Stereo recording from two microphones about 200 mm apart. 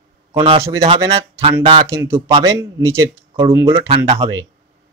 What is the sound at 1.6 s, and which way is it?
Speech, 20° right (ahead or behind).